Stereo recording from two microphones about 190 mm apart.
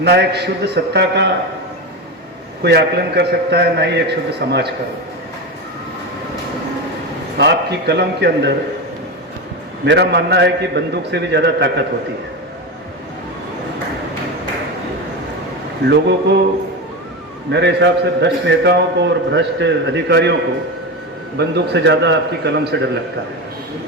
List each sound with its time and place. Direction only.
0.0 s a man's voice: 60° right (ahead or behind)
2.6 s a man's voice: 60° right (ahead or behind)
7.3 s a man's voice: 60° right (ahead or behind)
9.8 s a man's voice: 65° right (ahead or behind)
17.5 s a man's voice: 65° right (ahead or behind)
21.3 s a man's voice: 60° right (ahead or behind)